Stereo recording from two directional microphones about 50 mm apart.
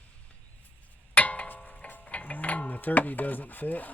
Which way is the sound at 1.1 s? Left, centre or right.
Left.